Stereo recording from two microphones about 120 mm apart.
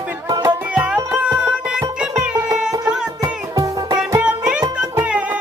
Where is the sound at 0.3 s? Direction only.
30° right (ahead or behind).